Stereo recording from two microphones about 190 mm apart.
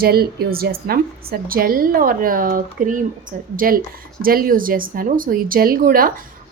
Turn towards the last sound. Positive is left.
turn(degrees=-50)  # may be behind; listen again after turning